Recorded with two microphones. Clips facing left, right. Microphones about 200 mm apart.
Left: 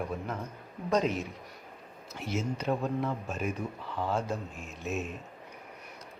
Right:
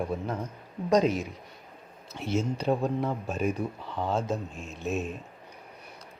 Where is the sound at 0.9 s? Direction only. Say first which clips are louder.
Right 5 dB; 40° right (ahead or behind).